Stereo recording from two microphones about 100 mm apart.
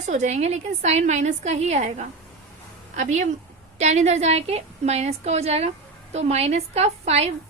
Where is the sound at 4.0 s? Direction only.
90° right.